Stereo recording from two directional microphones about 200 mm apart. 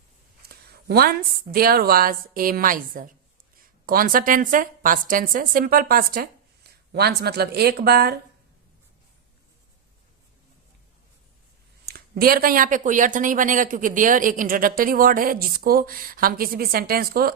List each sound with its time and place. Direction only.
0.4 s speech: 50° right (ahead or behind)
11.9 s speech: 50° right (ahead or behind)